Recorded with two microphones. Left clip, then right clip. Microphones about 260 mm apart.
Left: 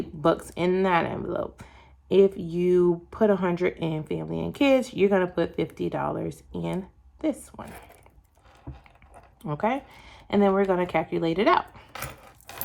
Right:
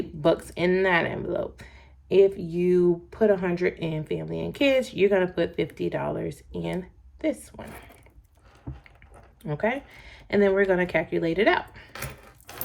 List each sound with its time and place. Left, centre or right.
0.5 s speech: centre
9.5 s speech: centre